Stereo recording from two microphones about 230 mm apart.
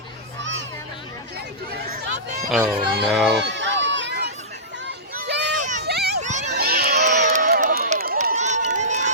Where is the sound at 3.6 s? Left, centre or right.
Right.